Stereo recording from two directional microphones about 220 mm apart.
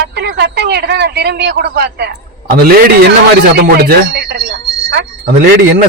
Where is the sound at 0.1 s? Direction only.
50° right (ahead or behind).